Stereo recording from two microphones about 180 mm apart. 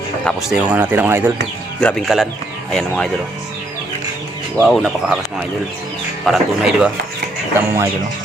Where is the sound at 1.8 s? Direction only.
5° left (ahead or behind).